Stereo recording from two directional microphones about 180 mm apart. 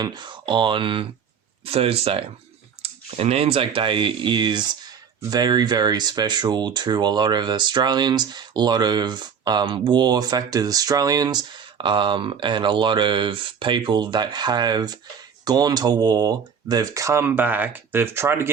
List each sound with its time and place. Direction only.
0.0 s speech: 25° right (ahead or behind)